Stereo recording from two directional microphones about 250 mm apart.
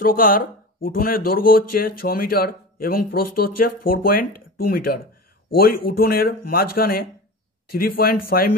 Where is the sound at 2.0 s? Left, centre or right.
Left.